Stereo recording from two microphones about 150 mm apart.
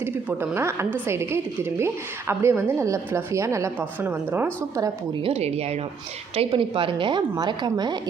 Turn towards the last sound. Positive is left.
turn(degrees=-30)  # may be behind; listen again after turning